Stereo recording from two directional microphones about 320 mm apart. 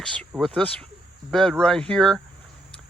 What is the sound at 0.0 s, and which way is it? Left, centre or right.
Speech, centre.